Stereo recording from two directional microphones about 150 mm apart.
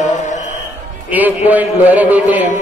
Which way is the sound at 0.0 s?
55° left (ahead or behind).